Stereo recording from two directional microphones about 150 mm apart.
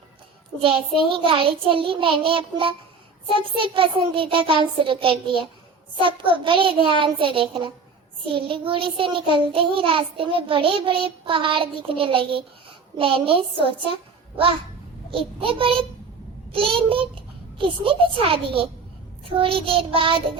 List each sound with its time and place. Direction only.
1.3 s child singing: 35° right (ahead or behind)
13.8 s a child's voice: 35° right (ahead or behind)
15.1 s child singing: 35° right (ahead or behind)
16.5 s a child's voice: 35° right (ahead or behind)
19.2 s child singing: 35° right (ahead or behind)